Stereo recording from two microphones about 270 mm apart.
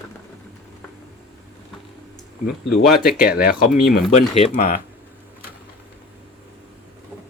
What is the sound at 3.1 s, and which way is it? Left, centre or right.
Speech, left.